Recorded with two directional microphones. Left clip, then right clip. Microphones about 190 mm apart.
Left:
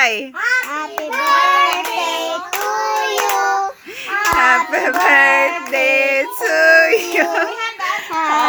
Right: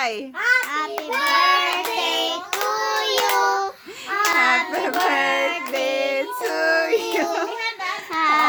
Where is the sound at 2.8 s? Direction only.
15° left (ahead or behind).